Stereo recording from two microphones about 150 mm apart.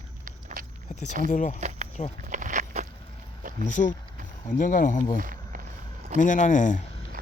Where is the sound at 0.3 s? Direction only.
65° right (ahead or behind).